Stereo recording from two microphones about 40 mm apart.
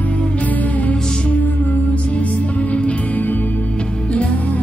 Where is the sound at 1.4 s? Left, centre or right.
Left.